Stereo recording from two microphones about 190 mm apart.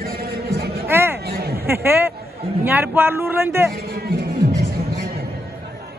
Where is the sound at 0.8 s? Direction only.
10° right (ahead or behind).